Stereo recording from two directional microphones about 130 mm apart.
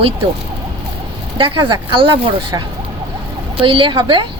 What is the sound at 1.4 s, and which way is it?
Speech, 40° right (ahead or behind).